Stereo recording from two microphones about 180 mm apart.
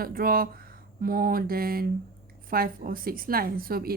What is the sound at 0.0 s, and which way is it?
A woman's voice, 55° right (ahead or behind).